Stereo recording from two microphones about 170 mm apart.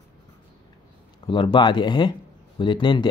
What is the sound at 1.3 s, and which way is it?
Speech, 30° left (ahead or behind).